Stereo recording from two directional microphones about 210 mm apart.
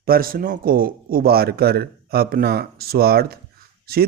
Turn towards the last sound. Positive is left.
turn(degrees=-45)  # may be behind; listen again after turning